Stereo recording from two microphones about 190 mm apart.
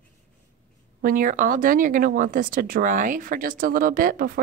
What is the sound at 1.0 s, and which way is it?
Speech, 45° right (ahead or behind).